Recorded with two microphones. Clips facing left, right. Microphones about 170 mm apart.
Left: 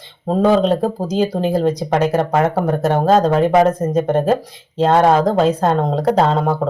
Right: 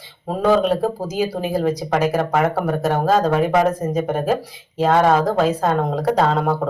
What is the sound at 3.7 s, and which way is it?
Speech, centre (ahead or behind).